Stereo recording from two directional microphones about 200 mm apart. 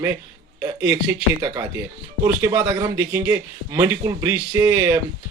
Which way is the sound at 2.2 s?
15° right (ahead or behind).